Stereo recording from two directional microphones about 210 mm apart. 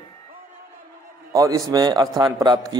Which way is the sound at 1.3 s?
15° right (ahead or behind).